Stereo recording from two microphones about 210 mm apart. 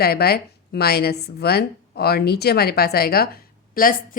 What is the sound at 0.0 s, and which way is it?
A woman's voice, 45° left (ahead or behind).